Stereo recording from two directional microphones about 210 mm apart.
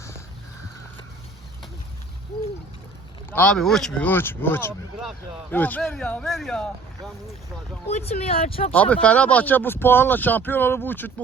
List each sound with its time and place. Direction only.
3.2 s speech: 10° left (ahead or behind)
7.9 s speech: 30° left (ahead or behind)
8.7 s speech: 5° left (ahead or behind)